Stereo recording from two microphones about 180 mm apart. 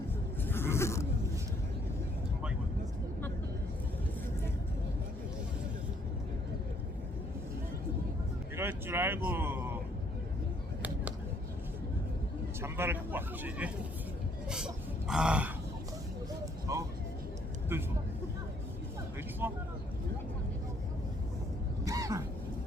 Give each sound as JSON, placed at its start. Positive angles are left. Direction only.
{"t": 0.4, "sound": "a sound", "side_deg": 15}
{"t": 8.5, "sound": "speech", "side_deg": -15}
{"t": 12.6, "sound": "speech", "side_deg": -15}
{"t": 16.7, "sound": "vehicle", "side_deg": -20}
{"t": 19.4, "sound": "speech", "side_deg": -10}
{"t": 21.8, "sound": "vehicle", "side_deg": -20}